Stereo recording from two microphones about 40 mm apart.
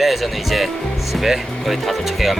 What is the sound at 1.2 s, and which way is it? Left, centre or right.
Speech, centre.